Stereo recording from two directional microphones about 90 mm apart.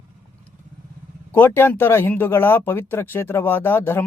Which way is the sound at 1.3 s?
25° left (ahead or behind).